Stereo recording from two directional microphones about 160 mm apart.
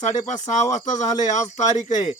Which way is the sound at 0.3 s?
50° left (ahead or behind).